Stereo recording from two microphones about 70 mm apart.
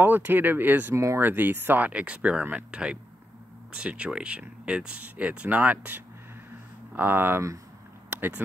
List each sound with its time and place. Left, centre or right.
0.0 s speech: right
0.9 s speech: right
1.2 s speech: right
8.1 s a sound: right